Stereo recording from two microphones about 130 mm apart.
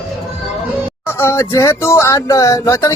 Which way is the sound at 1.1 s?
20° left (ahead or behind).